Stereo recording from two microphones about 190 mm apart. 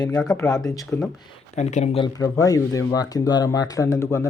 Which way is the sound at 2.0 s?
20° left (ahead or behind).